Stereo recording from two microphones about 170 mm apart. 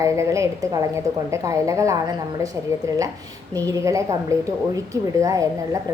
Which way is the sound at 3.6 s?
20° right (ahead or behind).